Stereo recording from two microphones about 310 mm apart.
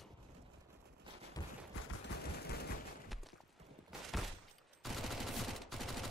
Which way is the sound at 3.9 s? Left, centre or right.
Centre.